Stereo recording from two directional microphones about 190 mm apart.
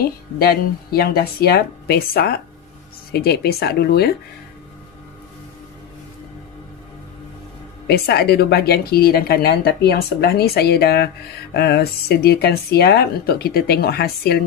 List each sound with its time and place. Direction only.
0.0 s speech: 55° left (ahead or behind)
7.8 s speech: 60° left (ahead or behind)